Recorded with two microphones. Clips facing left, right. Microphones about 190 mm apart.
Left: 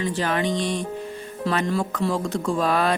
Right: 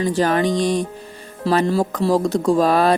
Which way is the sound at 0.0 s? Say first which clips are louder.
Right 6 dB; 40° right (ahead or behind).